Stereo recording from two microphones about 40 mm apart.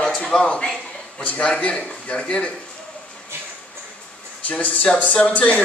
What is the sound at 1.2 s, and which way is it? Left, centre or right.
A man's voice, left.